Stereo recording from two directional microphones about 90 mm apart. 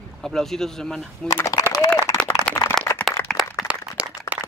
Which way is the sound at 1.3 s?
35° left (ahead or behind).